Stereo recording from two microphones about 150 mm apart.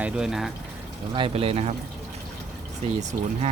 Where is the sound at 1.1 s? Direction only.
35° right (ahead or behind).